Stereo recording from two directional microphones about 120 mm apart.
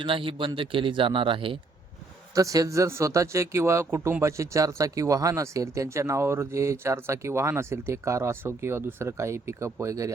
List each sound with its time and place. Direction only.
0.0 s a man's voice: 45° right (ahead or behind)
2.3 s speech: 30° right (ahead or behind)